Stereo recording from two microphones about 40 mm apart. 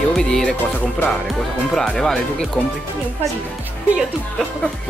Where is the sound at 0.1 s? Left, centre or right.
Centre.